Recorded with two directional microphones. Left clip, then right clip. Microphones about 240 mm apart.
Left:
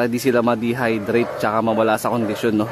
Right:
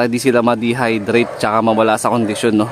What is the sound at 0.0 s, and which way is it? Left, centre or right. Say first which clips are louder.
Speech: right 4 dB; centre.